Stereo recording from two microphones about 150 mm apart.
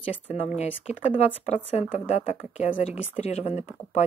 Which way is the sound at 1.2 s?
45° left (ahead or behind).